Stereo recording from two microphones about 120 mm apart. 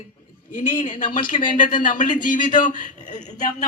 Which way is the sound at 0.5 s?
90° left.